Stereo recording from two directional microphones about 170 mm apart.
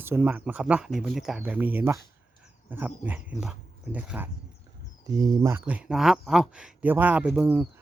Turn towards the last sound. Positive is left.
turn(degrees=-5)  # may be behind; listen again after turning